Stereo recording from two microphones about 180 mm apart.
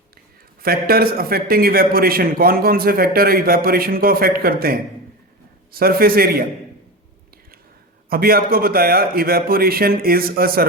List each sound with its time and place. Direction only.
0.6 s a man's voice: 55° right (ahead or behind)
8.1 s a man's voice: 55° right (ahead or behind)